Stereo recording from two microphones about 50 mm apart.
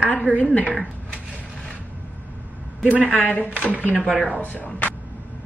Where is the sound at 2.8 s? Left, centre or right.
Left.